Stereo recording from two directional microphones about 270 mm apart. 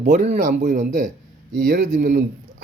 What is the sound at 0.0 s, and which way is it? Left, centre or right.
A man's voice, right.